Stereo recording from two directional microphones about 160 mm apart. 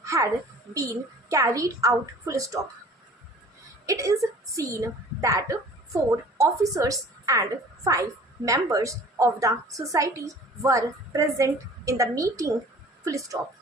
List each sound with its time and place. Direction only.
0.0 s a sound: 20° right (ahead or behind)
0.7 s a woman's voice: 20° right (ahead or behind)
3.8 s a woman's voice: 20° right (ahead or behind)